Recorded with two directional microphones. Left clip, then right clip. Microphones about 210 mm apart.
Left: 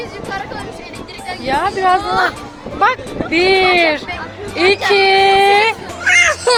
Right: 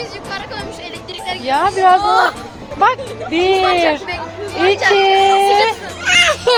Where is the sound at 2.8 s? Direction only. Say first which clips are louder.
Right 1 dB; 10° right (ahead or behind).